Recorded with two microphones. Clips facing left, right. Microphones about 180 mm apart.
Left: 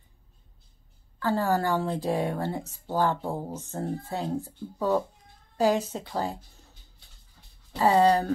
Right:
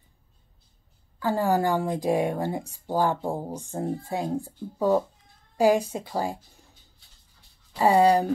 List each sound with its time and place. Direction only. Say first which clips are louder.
1.2 s speech: right 2 dB; 15° right (ahead or behind)
7.8 s speech: right 2 dB; 10° right (ahead or behind)